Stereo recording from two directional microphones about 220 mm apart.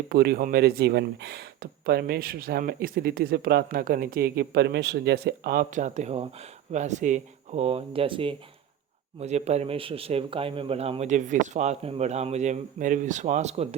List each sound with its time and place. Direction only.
0.1 s speech: 45° right (ahead or behind)